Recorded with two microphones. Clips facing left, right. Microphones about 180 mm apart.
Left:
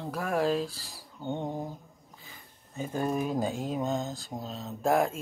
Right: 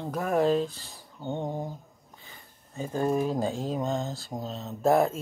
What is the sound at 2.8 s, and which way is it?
Speech, 30° right (ahead or behind).